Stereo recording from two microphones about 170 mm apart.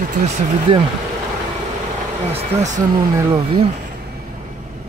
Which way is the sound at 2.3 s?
45° right (ahead or behind).